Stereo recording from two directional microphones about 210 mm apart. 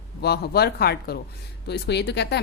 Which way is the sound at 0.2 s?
50° left (ahead or behind).